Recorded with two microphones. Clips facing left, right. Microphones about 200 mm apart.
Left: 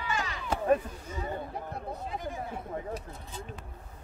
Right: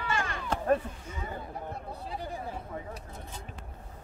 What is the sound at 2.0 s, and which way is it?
Chatter, 35° right (ahead or behind).